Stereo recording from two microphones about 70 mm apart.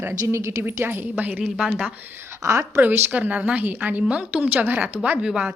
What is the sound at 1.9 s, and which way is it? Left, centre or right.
Speech, right.